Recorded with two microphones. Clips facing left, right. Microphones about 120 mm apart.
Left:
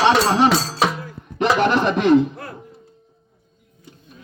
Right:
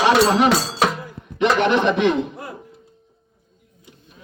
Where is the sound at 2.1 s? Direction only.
10° right (ahead or behind).